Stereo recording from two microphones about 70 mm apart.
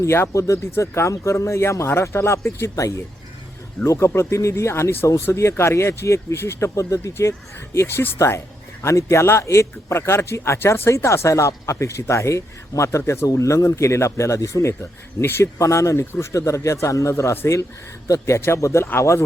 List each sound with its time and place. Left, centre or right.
0.0 s speech: left
13.0 s speech: left
13.2 s speech: left
15.5 s speech: left